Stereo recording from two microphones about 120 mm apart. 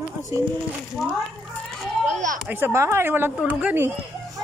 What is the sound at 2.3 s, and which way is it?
Speech, 15° right (ahead or behind).